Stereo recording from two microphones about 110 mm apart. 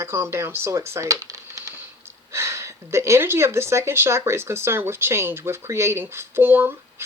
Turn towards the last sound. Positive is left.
turn(degrees=-20)  # may be behind; listen again after turning